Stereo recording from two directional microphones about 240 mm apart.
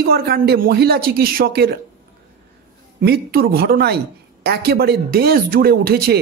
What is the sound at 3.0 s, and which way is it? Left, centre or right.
Speech, right.